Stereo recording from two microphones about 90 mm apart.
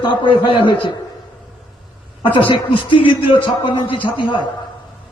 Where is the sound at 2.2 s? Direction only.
70° left (ahead or behind).